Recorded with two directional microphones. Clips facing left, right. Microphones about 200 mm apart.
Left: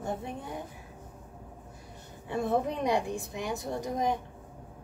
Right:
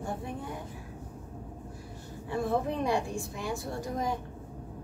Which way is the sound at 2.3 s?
20° left (ahead or behind).